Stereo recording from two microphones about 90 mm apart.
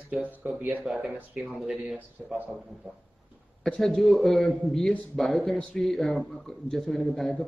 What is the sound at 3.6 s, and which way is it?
A man's voice, 5° left (ahead or behind).